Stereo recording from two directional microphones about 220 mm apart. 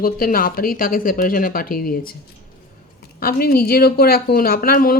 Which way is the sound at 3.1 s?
45° left (ahead or behind).